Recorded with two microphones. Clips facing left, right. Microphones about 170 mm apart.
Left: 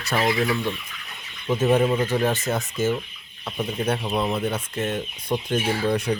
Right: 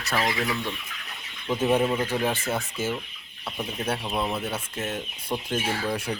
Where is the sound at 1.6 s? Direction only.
10° right (ahead or behind).